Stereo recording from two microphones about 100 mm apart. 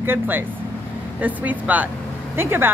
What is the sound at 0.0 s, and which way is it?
Speech, 20° right (ahead or behind).